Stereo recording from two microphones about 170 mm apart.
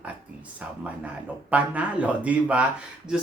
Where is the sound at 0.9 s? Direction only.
10° right (ahead or behind).